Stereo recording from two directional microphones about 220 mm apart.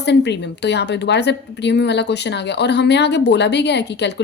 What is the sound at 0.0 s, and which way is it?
A woman's voice, 50° left (ahead or behind).